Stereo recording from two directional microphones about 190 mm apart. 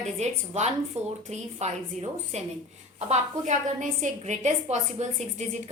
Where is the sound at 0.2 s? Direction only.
35° right (ahead or behind).